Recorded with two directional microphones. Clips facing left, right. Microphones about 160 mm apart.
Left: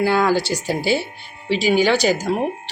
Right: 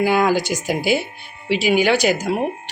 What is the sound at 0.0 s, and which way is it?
Speech, 15° right (ahead or behind).